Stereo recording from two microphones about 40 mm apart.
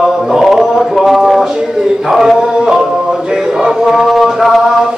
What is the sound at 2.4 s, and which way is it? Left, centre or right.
Music, centre.